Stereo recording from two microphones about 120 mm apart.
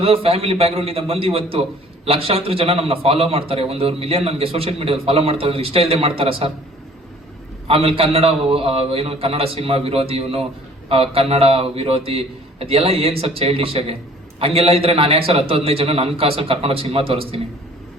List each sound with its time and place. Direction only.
0.0 s a man's voice: 55° right (ahead or behind)
7.7 s a man's voice: 50° right (ahead or behind)